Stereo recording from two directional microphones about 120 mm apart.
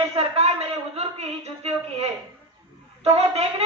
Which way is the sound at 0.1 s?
60° right (ahead or behind).